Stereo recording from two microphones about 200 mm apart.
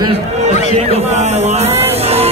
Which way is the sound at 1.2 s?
35° right (ahead or behind).